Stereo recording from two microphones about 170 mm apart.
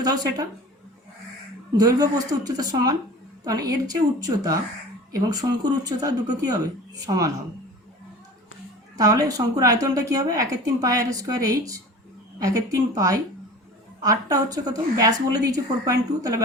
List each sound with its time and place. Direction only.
0.0 s a woman's voice: 25° right (ahead or behind)
1.7 s a woman's voice: 20° right (ahead or behind)
9.0 s a woman's voice: 20° right (ahead or behind)